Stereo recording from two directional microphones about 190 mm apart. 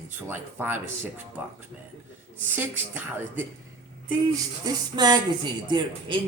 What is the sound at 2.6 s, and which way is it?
Speech, 10° right (ahead or behind).